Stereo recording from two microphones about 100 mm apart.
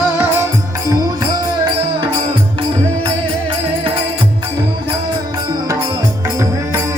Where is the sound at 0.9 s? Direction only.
35° right (ahead or behind).